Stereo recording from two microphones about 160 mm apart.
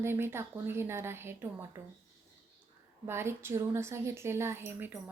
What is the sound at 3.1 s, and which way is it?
A woman's voice, 15° right (ahead or behind).